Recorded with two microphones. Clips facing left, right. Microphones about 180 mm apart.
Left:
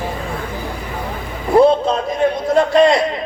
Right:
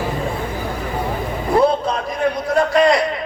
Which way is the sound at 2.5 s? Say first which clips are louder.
Left 2 dB; 25° left (ahead or behind).